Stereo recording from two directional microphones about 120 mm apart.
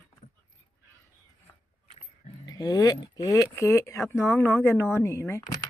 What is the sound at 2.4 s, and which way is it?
Speech, 35° left (ahead or behind).